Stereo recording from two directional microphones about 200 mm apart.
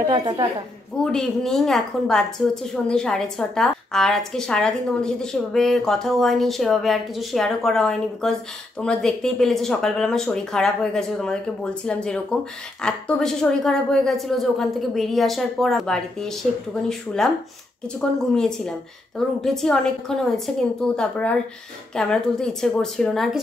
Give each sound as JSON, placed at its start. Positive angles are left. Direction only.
{"t": 0.0, "sound": "a woman's voice", "side_deg": -20}
{"t": 1.0, "sound": "a woman's voice", "side_deg": 0}
{"t": 18.3, "sound": "a woman's voice", "side_deg": 5}